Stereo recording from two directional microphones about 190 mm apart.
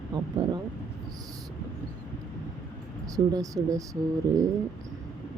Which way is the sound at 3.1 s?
20° right (ahead or behind).